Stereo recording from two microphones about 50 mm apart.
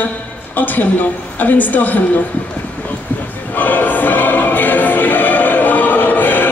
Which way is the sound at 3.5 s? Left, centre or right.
Left.